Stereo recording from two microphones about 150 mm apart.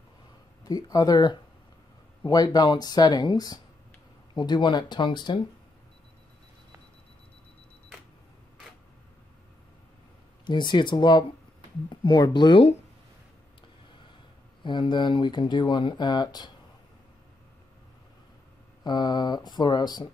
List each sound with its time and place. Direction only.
0.7 s speech: 25° left (ahead or behind)
10.4 s speech: 30° left (ahead or behind)
14.6 s speech: 30° left (ahead or behind)
18.9 s speech: 30° left (ahead or behind)